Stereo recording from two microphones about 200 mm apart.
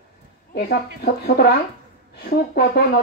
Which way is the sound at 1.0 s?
50° left (ahead or behind).